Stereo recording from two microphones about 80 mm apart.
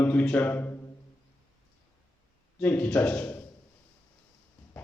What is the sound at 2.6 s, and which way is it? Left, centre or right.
Speech, centre.